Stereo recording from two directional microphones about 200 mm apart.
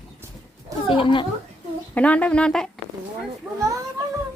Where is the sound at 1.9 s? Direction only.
5° left (ahead or behind).